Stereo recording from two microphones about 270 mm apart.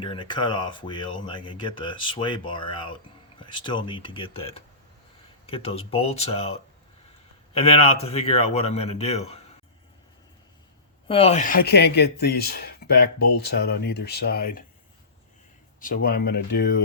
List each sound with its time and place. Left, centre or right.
0.0 s speech: centre
11.1 s speech: left
13.1 s speech: left
13.4 s speech: left
15.8 s speech: left